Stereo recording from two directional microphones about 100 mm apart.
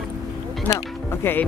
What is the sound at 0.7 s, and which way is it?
Speech, 25° left (ahead or behind).